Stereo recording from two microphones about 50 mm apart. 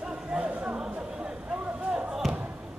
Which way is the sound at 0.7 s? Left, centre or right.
Centre.